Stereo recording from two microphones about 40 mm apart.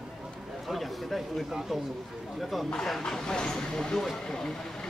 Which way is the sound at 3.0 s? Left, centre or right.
Centre.